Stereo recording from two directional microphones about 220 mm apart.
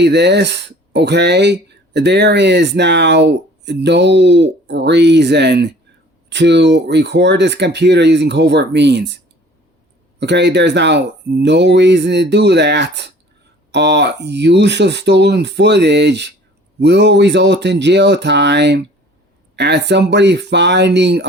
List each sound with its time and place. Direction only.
0.0 s speech: 50° right (ahead or behind)
10.2 s speech: 50° right (ahead or behind)